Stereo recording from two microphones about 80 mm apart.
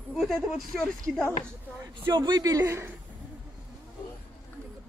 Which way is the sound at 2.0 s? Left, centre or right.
Right.